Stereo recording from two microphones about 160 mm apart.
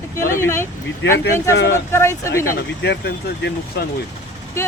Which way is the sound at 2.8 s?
90° left.